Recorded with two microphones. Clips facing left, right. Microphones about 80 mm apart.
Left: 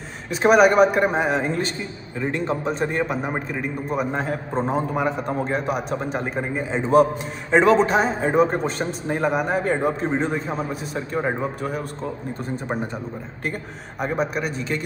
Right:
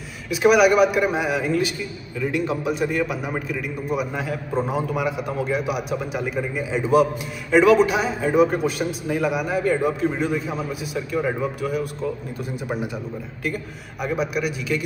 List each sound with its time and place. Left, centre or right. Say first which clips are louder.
0.3 s a man's voice: even; left
14.0 s a man's voice: even; left